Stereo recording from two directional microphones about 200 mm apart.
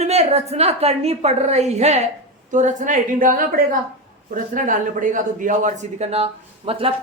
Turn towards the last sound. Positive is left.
turn(degrees=-30)  # may be behind; listen again after turning